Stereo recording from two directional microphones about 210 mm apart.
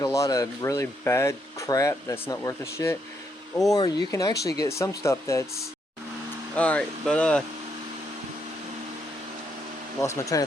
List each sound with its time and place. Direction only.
0.0 s speech: 15° left (ahead or behind)
6.6 s speech: 5° left (ahead or behind)
10.0 s speech: 15° left (ahead or behind)